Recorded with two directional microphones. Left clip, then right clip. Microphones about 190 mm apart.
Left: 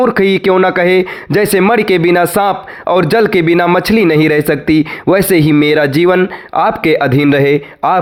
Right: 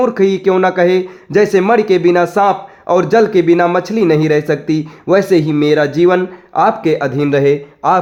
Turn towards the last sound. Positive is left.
turn(degrees=30)  # may be behind; listen again after turning